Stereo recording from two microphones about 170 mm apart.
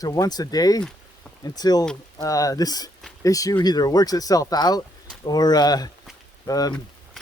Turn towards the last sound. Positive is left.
turn(degrees=20)  # may be behind; listen again after turning